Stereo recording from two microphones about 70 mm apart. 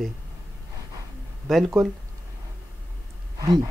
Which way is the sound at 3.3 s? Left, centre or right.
Right.